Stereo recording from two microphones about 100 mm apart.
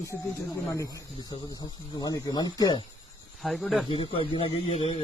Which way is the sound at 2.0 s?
40° left (ahead or behind).